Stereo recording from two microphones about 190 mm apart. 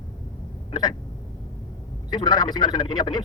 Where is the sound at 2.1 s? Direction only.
20° left (ahead or behind).